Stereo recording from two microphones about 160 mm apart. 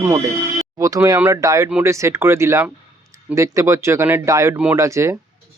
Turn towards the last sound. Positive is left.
turn(degrees=-20)  # may be behind; listen again after turning